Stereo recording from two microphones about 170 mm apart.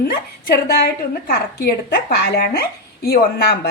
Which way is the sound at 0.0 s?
65° left (ahead or behind).